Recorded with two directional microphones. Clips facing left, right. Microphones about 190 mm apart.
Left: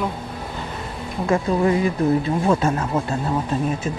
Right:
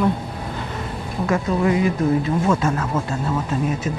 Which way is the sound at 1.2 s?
30° left (ahead or behind).